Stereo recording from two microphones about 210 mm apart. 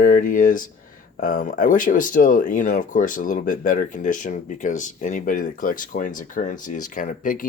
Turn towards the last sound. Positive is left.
turn(degrees=40)  # may be behind; listen again after turning